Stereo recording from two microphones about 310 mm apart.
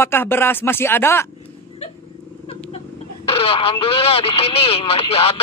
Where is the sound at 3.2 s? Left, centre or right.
Centre.